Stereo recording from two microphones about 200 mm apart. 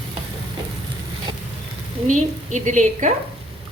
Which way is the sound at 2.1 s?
40° right (ahead or behind).